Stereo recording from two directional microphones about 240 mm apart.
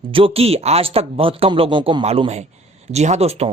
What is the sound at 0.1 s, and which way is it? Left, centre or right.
A man's voice, right.